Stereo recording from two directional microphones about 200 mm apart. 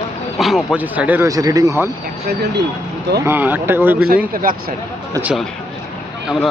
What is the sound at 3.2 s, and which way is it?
Speech, 10° right (ahead or behind).